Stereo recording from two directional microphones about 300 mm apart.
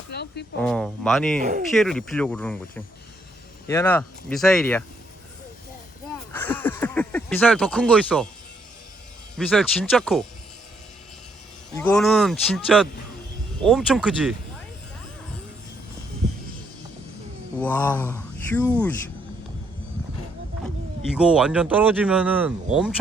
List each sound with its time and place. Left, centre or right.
0.1 s speech: left
0.6 s speech: centre
1.4 s speech: right
1.7 s speech: centre
6.3 s speech: centre
9.4 s speech: centre
11.8 s speech: centre
17.6 s speech: centre
21.2 s speech: centre